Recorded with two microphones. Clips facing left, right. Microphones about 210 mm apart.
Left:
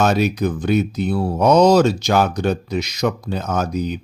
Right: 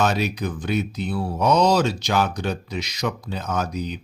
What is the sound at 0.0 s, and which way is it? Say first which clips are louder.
Speech: left 5 dB; 45° left (ahead or behind).